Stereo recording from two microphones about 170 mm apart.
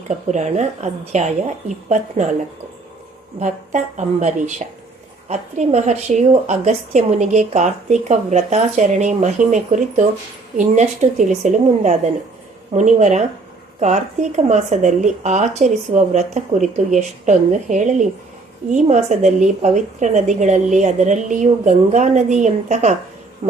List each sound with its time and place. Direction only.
0.1 s a woman's voice: 45° right (ahead or behind)
3.4 s a woman's voice: 45° right (ahead or behind)
23.4 s a sound: 40° right (ahead or behind)